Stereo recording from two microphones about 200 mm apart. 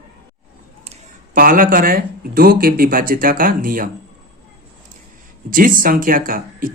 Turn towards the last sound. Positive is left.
turn(degrees=-45)  # may be behind; listen again after turning